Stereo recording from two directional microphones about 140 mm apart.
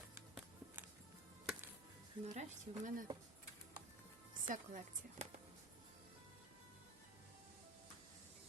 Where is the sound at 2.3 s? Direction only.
55° right (ahead or behind).